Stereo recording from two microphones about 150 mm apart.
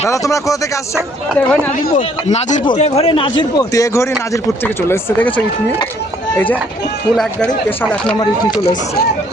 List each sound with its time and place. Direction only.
0.1 s speech: 20° left (ahead or behind)
0.9 s speech: 5° right (ahead or behind)
2.0 s speech: 50° left (ahead or behind)
3.6 s speech: 20° left (ahead or behind)